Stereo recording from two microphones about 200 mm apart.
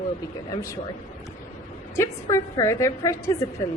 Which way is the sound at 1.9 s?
15° left (ahead or behind).